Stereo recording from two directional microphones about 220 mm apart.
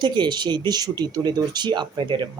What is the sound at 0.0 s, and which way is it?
Speech, 20° right (ahead or behind).